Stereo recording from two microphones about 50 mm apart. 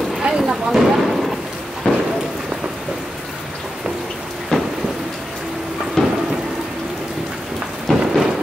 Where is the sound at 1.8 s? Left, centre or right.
Left.